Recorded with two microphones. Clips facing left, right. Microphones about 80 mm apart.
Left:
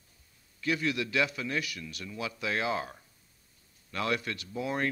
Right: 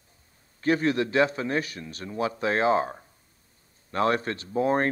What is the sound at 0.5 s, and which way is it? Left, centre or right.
A man's voice, right.